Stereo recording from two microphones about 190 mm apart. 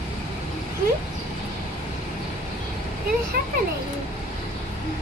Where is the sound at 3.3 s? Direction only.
55° right (ahead or behind).